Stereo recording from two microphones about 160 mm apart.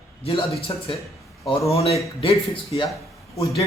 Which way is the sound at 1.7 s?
40° left (ahead or behind).